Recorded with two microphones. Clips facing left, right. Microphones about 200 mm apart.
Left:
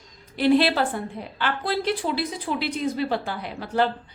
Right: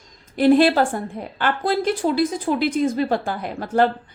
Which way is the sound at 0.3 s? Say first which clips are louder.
Right 5 dB; 50° right (ahead or behind).